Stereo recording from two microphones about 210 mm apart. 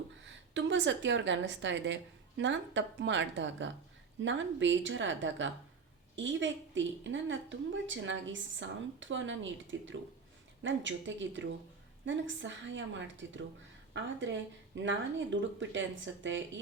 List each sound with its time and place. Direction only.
0.5 s a woman's voice: 60° right (ahead or behind)